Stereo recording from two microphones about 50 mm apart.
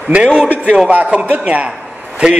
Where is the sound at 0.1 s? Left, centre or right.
Centre.